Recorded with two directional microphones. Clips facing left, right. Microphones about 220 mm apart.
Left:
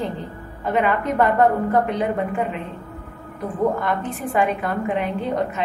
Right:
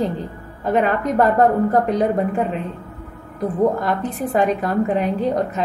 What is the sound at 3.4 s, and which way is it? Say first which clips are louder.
A woman's voice: right 3 dB; 35° right (ahead or behind).